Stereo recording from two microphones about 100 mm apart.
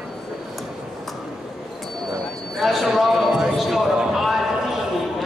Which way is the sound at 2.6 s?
Centre (ahead or behind).